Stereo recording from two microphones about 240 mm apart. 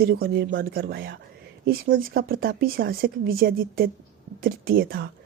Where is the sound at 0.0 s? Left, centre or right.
Right.